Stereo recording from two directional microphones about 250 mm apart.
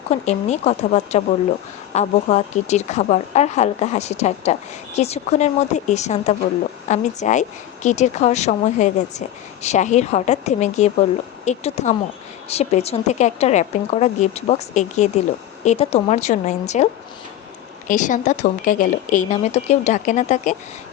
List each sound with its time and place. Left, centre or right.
0.1 s speech: left